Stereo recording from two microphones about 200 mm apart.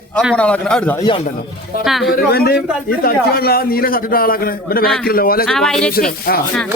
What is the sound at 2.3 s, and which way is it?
A man's voice, 50° left (ahead or behind).